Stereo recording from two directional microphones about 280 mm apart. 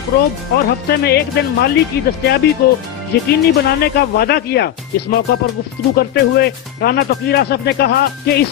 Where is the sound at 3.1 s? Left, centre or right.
Left.